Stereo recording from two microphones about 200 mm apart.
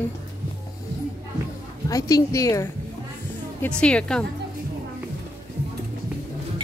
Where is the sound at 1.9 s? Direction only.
15° left (ahead or behind).